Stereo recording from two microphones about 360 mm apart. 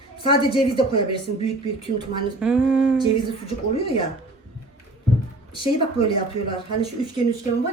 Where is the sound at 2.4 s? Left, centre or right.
Centre.